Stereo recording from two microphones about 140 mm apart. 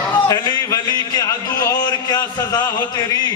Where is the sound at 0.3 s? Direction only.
25° left (ahead or behind).